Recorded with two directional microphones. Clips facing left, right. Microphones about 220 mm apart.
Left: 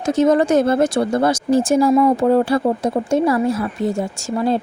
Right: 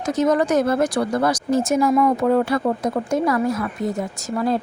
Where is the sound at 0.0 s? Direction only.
25° left (ahead or behind).